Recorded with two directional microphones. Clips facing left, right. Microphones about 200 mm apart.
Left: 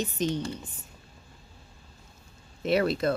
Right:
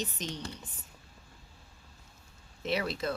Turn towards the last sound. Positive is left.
turn(degrees=55)  # may be behind; listen again after turning